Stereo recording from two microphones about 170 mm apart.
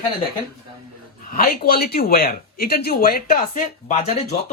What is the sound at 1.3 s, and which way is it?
Speech, 60° left (ahead or behind).